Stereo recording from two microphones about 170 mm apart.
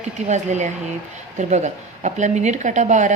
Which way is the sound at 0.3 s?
45° right (ahead or behind).